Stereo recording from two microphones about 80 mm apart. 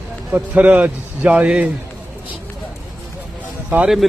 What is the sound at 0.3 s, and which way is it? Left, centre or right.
A man's voice, right.